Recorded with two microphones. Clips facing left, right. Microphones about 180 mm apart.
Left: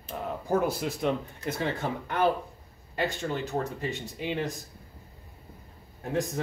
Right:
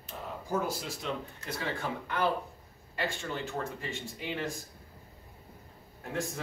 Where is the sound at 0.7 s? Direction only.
60° left (ahead or behind).